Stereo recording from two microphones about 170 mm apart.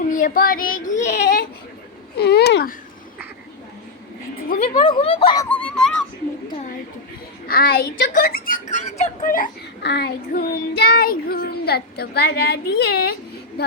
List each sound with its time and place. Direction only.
0.1 s a woman's voice: 55° left (ahead or behind)
2.1 s child singing: 75° left (ahead or behind)
4.7 s speech: 30° left (ahead or behind)
5.5 s a sound: 5° left (ahead or behind)
7.4 s speech: 60° left (ahead or behind)
9.8 s child singing: 75° left (ahead or behind)